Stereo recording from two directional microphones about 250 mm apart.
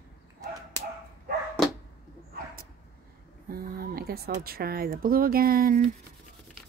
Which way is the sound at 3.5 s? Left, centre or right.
Right.